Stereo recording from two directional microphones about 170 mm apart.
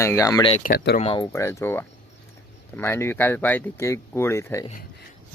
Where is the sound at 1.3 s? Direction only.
15° left (ahead or behind).